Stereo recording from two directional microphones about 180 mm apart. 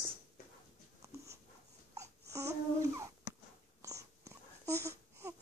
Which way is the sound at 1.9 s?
15° right (ahead or behind).